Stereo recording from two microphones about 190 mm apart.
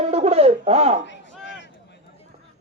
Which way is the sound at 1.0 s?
70° left (ahead or behind).